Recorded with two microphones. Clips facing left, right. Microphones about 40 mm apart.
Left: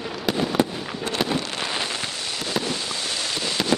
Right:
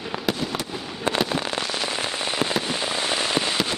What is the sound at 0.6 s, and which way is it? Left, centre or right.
Fireworks, left.